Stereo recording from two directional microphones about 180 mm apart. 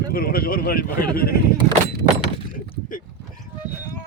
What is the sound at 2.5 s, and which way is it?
Speech, 50° left (ahead or behind).